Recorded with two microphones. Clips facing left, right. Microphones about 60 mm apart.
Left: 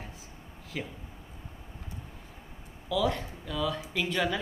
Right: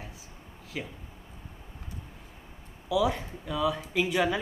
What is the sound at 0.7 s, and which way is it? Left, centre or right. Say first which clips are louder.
Speech: even; centre.